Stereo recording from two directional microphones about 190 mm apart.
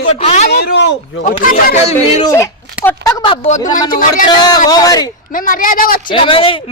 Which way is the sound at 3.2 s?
30° left (ahead or behind).